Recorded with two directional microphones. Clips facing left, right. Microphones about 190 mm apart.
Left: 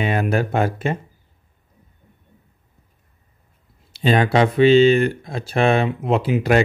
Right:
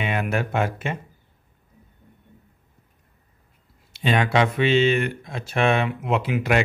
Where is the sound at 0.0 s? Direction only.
35° left (ahead or behind).